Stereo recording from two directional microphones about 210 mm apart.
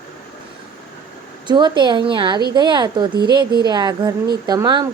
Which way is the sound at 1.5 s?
20° right (ahead or behind).